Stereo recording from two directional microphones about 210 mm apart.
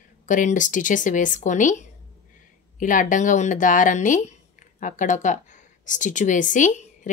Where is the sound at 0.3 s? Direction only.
40° left (ahead or behind).